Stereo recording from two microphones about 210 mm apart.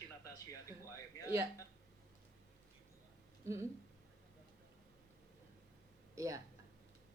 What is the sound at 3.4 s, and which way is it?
Speech, 15° right (ahead or behind).